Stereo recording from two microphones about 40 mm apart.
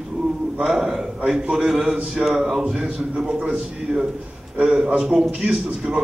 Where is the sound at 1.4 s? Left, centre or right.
Right.